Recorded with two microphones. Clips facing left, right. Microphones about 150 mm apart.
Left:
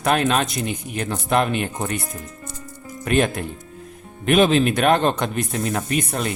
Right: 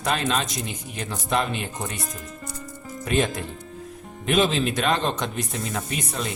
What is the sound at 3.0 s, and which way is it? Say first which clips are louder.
Speech: left 4 dB; 60° left (ahead or behind).